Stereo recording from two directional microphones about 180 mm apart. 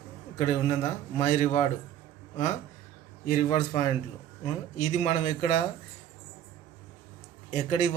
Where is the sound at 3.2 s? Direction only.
50° left (ahead or behind).